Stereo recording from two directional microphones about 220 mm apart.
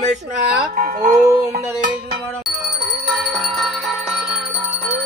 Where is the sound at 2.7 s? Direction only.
30° right (ahead or behind).